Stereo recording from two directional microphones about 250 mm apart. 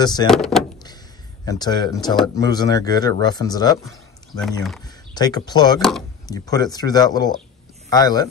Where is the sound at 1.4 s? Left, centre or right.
Centre.